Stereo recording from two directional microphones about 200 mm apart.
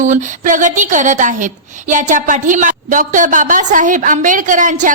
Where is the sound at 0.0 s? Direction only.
40° right (ahead or behind).